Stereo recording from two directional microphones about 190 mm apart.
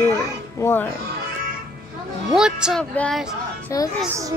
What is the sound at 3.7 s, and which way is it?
Speech, 15° left (ahead or behind).